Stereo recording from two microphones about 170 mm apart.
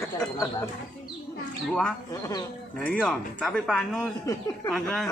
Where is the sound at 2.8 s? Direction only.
10° left (ahead or behind).